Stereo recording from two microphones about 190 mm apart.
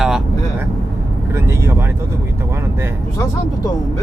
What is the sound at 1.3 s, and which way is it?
Speech, 15° right (ahead or behind).